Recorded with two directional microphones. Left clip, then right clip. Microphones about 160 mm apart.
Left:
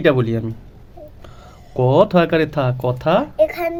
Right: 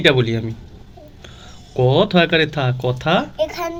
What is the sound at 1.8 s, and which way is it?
Speech, 35° left (ahead or behind).